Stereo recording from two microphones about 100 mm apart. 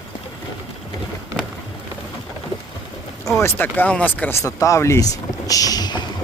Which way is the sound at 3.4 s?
20° left (ahead or behind).